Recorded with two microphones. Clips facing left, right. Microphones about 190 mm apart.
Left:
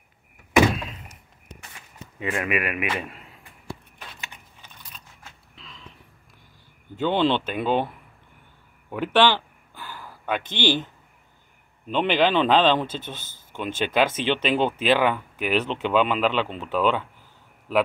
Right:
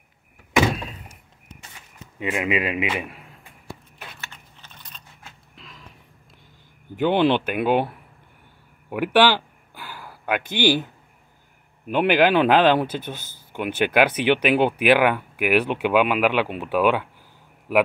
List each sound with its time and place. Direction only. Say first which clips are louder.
2.1 s speech: right 2 dB; 20° right (ahead or behind)
4.2 s typing: even; 15° left (ahead or behind)
5.6 s a sound: right 1 dB; 5° right (ahead or behind)
7.0 s speech: right 3 dB; 15° right (ahead or behind)
8.9 s a sound: right 2 dB; 10° right (ahead or behind)
11.9 s speech: right 3 dB; 10° right (ahead or behind)